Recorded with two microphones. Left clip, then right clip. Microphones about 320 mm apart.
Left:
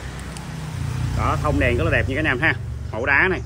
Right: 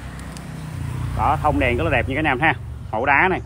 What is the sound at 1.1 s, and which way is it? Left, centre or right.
Speech, centre.